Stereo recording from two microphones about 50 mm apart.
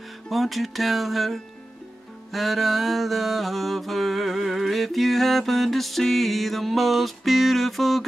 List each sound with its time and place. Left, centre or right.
0.3 s mantra: centre